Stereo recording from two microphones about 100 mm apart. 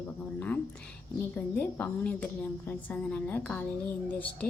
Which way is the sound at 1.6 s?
15° left (ahead or behind).